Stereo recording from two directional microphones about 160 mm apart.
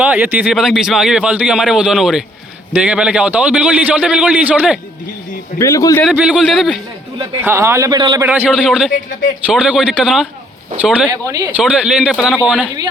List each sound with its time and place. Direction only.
0.0 s a man's voice: 10° right (ahead or behind)
5.5 s a man's voice: 20° left (ahead or behind)
6.0 s a man's voice: 5° right (ahead or behind)
7.4 s a man's voice: 15° right (ahead or behind)
8.2 s a man's voice: 10° right (ahead or behind)